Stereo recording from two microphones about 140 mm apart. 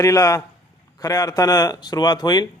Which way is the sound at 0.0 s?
25° left (ahead or behind).